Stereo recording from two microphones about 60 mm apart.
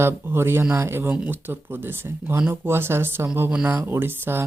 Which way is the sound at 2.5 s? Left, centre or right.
Right.